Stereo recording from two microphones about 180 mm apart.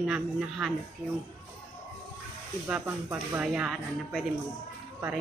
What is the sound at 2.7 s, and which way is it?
A woman's voice, 5° right (ahead or behind).